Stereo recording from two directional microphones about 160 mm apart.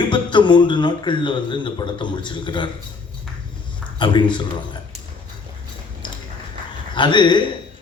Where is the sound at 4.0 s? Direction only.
30° left (ahead or behind).